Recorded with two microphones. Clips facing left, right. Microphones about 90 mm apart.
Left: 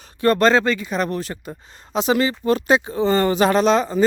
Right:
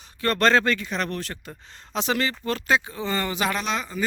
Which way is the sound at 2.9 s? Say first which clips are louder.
Left 10 dB; 35° left (ahead or behind).